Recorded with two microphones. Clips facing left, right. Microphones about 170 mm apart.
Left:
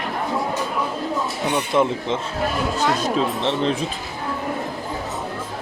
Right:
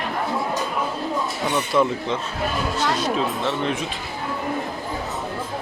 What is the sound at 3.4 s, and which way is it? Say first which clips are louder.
Speech: left 3 dB; 25° left (ahead or behind).